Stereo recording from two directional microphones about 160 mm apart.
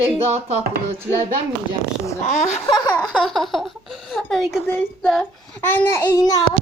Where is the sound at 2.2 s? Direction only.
50° left (ahead or behind).